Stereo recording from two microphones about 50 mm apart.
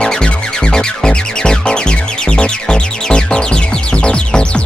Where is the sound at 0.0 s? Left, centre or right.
Centre.